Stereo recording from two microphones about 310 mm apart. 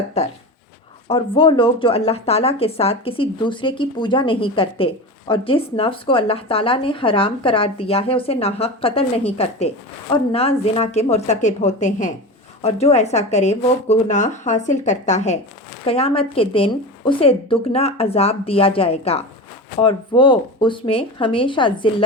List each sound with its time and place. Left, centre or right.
0.2 s a woman's voice: centre